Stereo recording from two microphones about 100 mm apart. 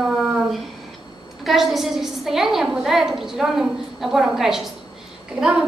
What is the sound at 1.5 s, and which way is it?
A woman's voice, centre (ahead or behind).